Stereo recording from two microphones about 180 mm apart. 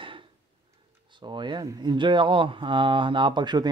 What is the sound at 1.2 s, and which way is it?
A man's voice, 25° right (ahead or behind).